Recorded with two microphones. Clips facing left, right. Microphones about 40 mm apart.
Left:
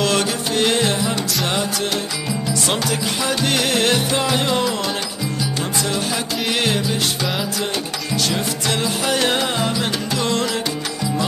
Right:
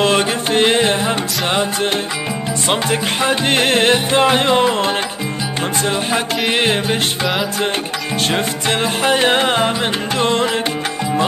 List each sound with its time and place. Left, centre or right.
0.0 s music: right
8.3 s music: right